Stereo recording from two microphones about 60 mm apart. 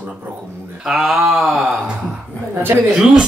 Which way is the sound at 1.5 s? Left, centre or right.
Centre.